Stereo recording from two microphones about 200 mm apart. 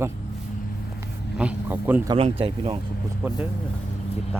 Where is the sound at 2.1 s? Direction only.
30° right (ahead or behind).